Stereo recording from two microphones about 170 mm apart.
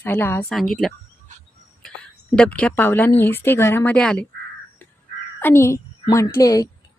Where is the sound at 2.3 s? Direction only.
5° left (ahead or behind).